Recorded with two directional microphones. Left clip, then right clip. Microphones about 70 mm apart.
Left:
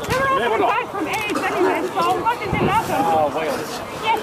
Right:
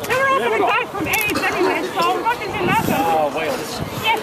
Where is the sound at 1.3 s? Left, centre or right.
Centre.